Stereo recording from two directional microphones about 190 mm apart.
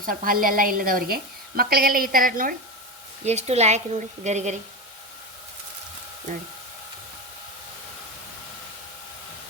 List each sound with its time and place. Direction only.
0.0 s a woman's voice: 50° right (ahead or behind)
3.2 s a woman's voice: 35° right (ahead or behind)